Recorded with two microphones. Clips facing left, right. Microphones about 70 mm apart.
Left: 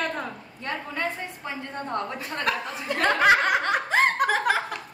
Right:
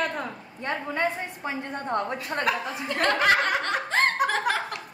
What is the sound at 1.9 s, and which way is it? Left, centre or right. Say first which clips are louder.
Speech: right 3 dB; right.